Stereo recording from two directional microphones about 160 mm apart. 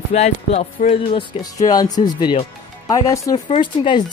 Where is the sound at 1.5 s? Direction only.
25° left (ahead or behind).